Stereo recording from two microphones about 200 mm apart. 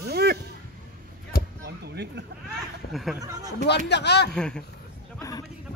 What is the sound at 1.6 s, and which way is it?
Speech, 55° right (ahead or behind).